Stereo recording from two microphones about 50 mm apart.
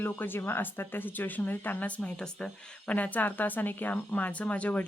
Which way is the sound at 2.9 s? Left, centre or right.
Left.